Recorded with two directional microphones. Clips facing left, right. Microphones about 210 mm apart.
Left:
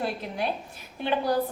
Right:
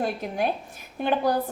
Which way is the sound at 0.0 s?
50° right (ahead or behind).